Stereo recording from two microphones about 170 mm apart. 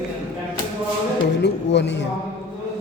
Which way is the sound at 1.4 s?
90° left.